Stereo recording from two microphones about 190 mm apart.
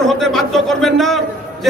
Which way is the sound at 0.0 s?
Centre (ahead or behind).